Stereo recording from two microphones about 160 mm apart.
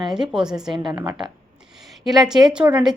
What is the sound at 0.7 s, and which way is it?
Speech, 30° right (ahead or behind).